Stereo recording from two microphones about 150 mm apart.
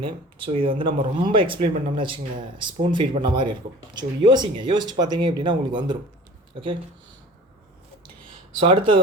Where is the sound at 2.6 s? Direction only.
30° right (ahead or behind).